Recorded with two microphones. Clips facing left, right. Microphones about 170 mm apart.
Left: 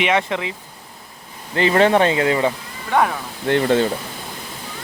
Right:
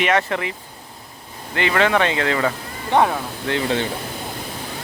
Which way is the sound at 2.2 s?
20° left (ahead or behind).